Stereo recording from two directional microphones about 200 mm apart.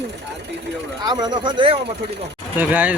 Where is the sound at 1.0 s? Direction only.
20° right (ahead or behind).